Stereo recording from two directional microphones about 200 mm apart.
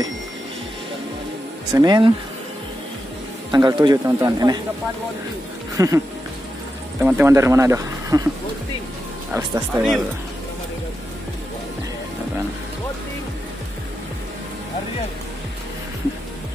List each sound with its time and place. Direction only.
1.7 s a man's voice: 20° right (ahead or behind)
3.5 s a man's voice: 20° right (ahead or behind)
5.8 s speech: 15° right (ahead or behind)
7.0 s speech: 10° right (ahead or behind)
9.3 s speech: centre (ahead or behind)